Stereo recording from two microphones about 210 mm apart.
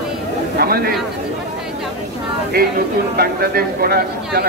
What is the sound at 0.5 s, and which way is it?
Speech, 45° right (ahead or behind).